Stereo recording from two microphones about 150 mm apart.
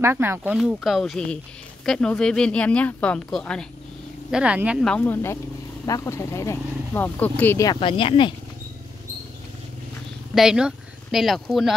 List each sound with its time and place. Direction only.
0.0 s speech: 15° right (ahead or behind)
0.6 s speech: centre (ahead or behind)
4.3 s speech: 5° right (ahead or behind)
4.8 s speech: 10° left (ahead or behind)
7.6 s speech: 30° left (ahead or behind)
10.3 s speech: 5° right (ahead or behind)